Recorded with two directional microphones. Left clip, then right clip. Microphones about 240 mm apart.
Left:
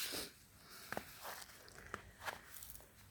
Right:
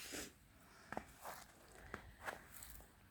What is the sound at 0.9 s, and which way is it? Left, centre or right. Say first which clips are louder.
Walk: left 2 dB; centre.